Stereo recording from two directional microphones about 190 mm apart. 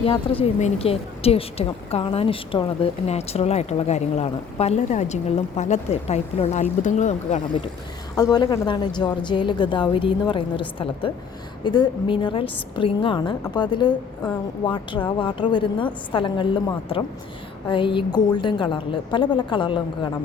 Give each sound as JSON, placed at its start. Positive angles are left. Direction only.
{"t": 0.0, "sound": "a woman's voice", "side_deg": 30}
{"t": 8.1, "sound": "a woman's voice", "side_deg": 20}